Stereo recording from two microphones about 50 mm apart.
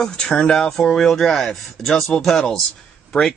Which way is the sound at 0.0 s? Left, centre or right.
Centre.